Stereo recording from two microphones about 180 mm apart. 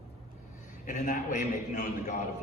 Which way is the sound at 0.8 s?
45° left (ahead or behind).